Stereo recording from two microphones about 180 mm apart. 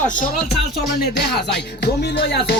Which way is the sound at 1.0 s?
60° left (ahead or behind).